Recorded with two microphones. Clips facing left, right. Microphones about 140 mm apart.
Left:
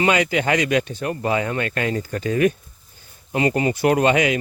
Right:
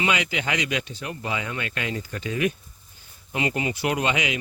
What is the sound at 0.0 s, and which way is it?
Speech, 45° left (ahead or behind).